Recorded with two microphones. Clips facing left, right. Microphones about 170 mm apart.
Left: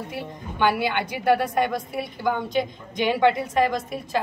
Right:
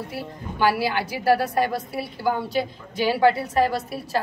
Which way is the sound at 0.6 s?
5° right (ahead or behind).